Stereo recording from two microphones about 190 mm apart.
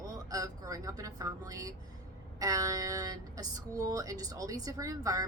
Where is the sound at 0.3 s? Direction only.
20° right (ahead or behind).